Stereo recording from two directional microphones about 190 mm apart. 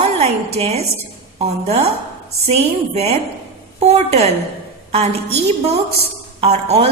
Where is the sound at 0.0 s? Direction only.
35° right (ahead or behind).